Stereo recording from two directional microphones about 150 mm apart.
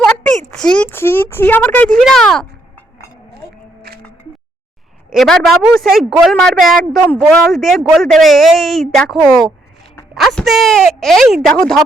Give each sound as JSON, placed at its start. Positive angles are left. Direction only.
{"t": 0.5, "sound": "speech", "side_deg": 5}
{"t": 3.9, "sound": "music", "side_deg": -90}
{"t": 5.1, "sound": "speech", "side_deg": 0}